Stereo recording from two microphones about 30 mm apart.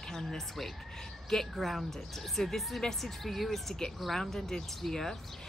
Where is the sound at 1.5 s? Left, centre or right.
Centre.